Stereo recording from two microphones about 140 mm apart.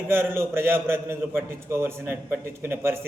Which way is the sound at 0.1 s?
15° right (ahead or behind).